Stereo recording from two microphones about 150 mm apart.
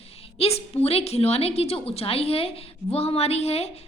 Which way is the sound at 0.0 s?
40° left (ahead or behind).